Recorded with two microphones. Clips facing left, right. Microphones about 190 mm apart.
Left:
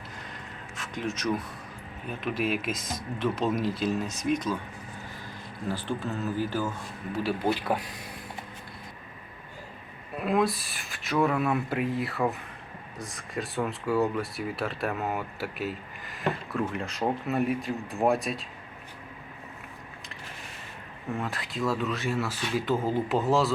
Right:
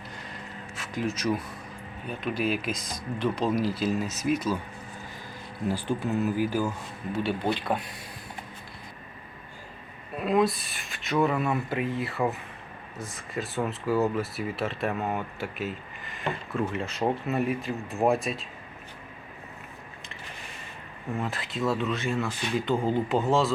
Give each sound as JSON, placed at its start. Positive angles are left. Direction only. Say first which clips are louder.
{"t": 0.8, "sound": "speech", "louder": "right 2 dB", "side_deg": 0}
{"t": 5.6, "sound": "speech", "louder": "right 3 dB", "side_deg": -15}
{"t": 7.2, "sound": "speech", "louder": "even", "side_deg": 5}
{"t": 10.2, "sound": "speech", "louder": "right 2 dB", "side_deg": 0}
{"t": 21.2, "sound": "speech", "louder": "right 2 dB", "side_deg": 0}